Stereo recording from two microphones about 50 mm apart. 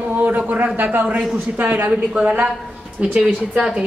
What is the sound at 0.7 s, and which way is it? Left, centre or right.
A man's voice, right.